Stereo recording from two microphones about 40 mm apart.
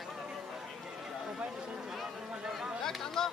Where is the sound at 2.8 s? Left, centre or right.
Centre.